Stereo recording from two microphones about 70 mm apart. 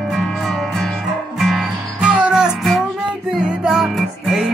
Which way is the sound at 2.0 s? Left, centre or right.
Centre.